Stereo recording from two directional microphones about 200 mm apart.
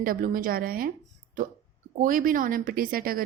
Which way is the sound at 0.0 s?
45° right (ahead or behind).